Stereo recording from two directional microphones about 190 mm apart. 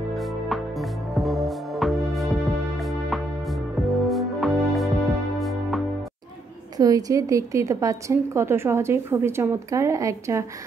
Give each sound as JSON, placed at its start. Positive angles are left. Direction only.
{"t": 0.1, "sound": "music", "side_deg": 0}
{"t": 6.8, "sound": "a woman's voice", "side_deg": -20}